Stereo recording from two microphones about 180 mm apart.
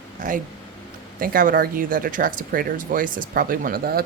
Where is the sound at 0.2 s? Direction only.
45° right (ahead or behind).